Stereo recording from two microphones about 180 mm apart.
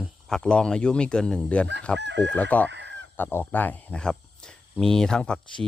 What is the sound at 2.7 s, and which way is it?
Fowl, 75° right (ahead or behind).